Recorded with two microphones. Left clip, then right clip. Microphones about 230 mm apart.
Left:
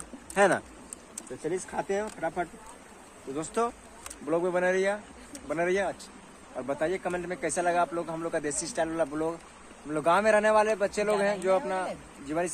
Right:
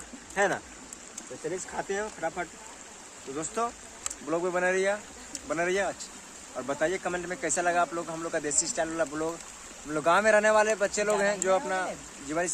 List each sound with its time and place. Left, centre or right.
0.3 s speech: left
1.8 s speech: left
4.3 s speech: centre